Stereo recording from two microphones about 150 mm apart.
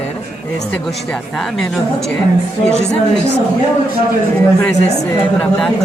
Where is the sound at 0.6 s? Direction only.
5° left (ahead or behind).